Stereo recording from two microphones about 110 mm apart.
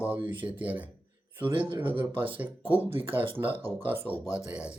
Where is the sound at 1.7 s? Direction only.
50° right (ahead or behind).